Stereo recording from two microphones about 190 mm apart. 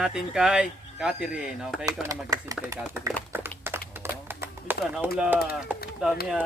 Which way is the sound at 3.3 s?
10° right (ahead or behind).